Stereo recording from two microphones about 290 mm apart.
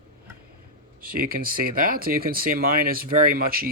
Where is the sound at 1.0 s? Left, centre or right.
Right.